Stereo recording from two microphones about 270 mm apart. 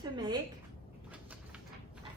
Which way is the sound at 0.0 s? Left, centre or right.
Centre.